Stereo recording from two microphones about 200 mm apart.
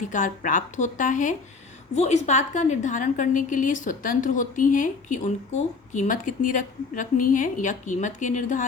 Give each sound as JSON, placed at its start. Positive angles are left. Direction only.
{"t": 0.0, "sound": "a woman's voice", "side_deg": 40}